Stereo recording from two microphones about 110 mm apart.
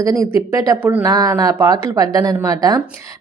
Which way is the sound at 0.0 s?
30° right (ahead or behind).